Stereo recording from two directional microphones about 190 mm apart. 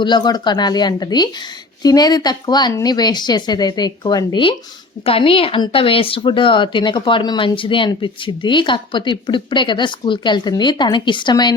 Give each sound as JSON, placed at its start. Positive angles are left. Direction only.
{"t": 0.0, "sound": "speech", "side_deg": 25}